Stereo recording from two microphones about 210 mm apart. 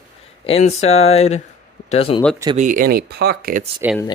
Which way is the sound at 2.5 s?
35° right (ahead or behind).